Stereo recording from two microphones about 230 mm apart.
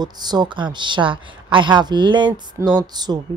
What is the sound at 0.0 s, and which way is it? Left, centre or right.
Speech, centre.